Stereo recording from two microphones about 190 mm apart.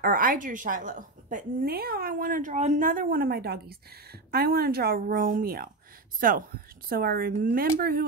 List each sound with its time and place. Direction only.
0.0 s a woman's voice: 50° right (ahead or behind)